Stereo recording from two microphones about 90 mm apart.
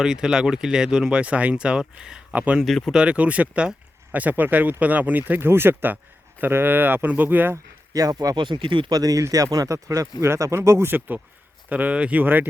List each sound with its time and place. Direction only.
0.0 s speech: 5° right (ahead or behind)
2.6 s speech: 5° left (ahead or behind)
2.9 s speech: 10° right (ahead or behind)
7.5 s speech: 40° right (ahead or behind)
8.4 s speech: 60° right (ahead or behind)
8.9 s speech: 45° right (ahead or behind); by 12.5 s 20° right (ahead or behind)